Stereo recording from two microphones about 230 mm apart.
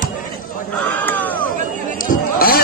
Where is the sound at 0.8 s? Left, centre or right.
Centre.